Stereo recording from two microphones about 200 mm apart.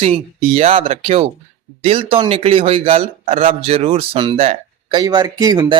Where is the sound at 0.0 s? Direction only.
30° right (ahead or behind).